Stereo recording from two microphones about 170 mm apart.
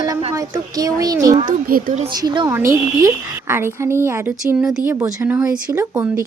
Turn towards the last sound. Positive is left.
turn(degrees=-15)  # may be behind; listen again after turning